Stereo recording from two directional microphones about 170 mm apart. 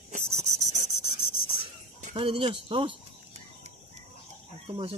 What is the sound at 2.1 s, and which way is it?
Speech, 30° right (ahead or behind).